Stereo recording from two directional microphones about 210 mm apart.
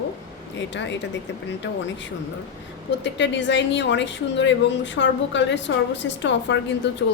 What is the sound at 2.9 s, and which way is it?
A woman's voice, 60° left (ahead or behind).